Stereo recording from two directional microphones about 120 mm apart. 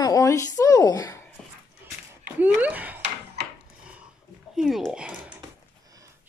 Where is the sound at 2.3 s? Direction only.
10° right (ahead or behind).